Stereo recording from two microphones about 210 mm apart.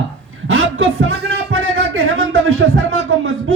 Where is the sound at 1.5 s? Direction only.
75° right (ahead or behind).